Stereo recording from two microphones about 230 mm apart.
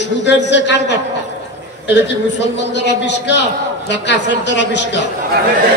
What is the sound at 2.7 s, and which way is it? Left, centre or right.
A man's voice, left.